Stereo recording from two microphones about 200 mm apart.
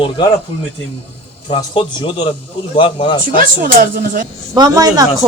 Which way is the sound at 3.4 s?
45° right (ahead or behind).